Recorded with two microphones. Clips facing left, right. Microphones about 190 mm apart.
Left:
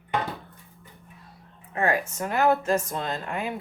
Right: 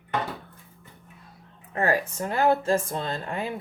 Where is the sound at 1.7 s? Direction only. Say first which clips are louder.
Right 1 dB; 40° right (ahead or behind).